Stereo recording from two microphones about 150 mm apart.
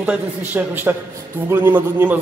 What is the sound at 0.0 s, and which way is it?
A man's voice, 10° right (ahead or behind).